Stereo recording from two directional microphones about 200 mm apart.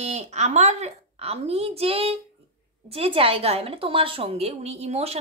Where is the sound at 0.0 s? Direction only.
35° right (ahead or behind).